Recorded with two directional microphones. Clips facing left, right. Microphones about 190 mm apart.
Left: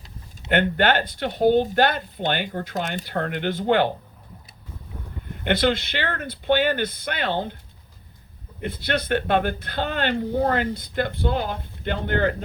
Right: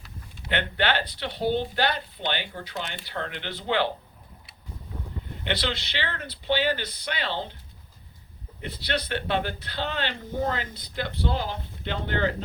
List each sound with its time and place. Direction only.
0.5 s speech: 50° left (ahead or behind)
5.4 s speech: 50° left (ahead or behind)
8.6 s speech: 50° left (ahead or behind)